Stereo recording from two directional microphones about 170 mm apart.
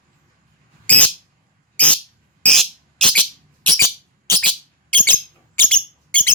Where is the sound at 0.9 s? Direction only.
10° left (ahead or behind).